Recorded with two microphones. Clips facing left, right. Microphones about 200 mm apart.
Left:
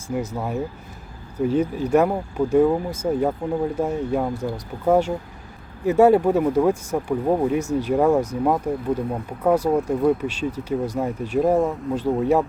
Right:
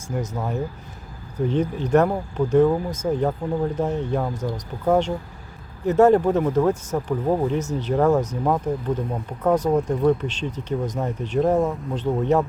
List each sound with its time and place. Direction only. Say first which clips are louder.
0.1 s speech: left 2 dB; 10° left (ahead or behind)